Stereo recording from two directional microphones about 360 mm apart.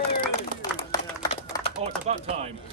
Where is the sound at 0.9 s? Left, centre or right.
Centre.